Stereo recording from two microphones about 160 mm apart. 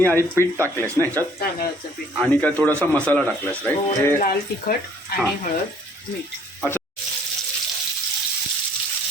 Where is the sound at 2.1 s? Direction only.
5° left (ahead or behind).